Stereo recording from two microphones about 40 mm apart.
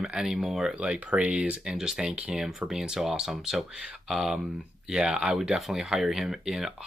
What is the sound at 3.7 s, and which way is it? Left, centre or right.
Speech, right.